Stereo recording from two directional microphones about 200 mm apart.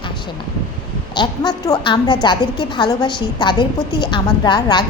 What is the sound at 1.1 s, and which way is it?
A woman's voice, 20° left (ahead or behind).